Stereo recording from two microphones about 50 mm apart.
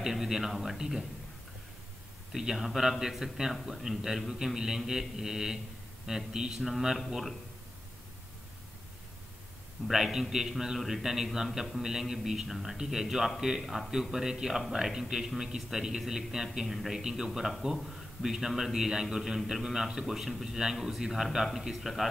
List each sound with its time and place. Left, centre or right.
0.0 s a man's voice: centre
2.3 s a man's voice: centre
9.8 s a man's voice: centre